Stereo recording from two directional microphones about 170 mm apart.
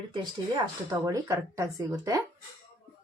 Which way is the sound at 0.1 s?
25° right (ahead or behind).